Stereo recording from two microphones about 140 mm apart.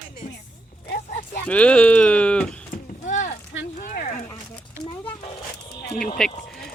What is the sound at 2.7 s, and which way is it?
Clip-clop, 60° left (ahead or behind).